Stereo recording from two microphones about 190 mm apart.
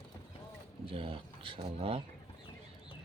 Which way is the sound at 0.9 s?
30° right (ahead or behind).